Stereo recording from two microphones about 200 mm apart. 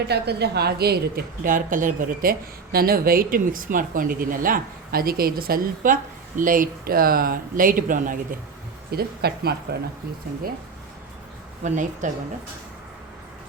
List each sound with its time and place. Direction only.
0.1 s speech: 55° right (ahead or behind)
11.6 s a woman's voice: 40° right (ahead or behind)